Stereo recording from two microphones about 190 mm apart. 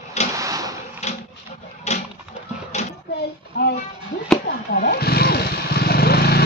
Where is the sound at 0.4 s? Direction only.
20° right (ahead or behind).